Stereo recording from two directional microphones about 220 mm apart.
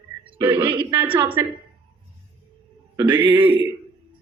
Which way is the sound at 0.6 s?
25° right (ahead or behind).